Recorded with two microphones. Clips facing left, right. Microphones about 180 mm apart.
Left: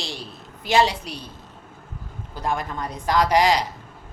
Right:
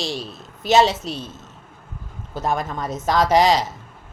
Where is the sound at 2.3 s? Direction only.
20° right (ahead or behind).